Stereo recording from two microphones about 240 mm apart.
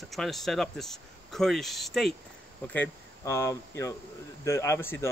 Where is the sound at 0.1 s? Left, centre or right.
Centre.